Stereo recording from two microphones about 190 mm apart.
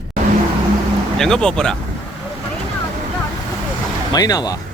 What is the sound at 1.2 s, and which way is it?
Speech, 5° left (ahead or behind).